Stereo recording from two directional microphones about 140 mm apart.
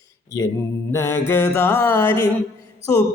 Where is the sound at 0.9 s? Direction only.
20° left (ahead or behind).